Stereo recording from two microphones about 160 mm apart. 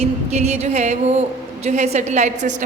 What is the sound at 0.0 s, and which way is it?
A woman's voice, 45° right (ahead or behind).